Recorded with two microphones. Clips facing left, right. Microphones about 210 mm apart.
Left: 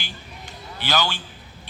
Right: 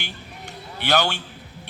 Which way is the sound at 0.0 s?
60° right (ahead or behind).